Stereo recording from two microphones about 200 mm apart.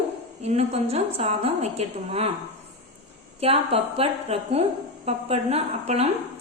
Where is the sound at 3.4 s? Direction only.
30° right (ahead or behind).